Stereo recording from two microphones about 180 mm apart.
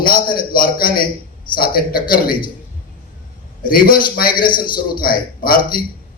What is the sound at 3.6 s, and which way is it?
A man's voice, 50° left (ahead or behind).